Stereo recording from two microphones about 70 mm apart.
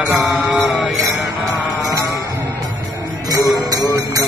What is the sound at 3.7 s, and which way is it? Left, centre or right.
Music, right.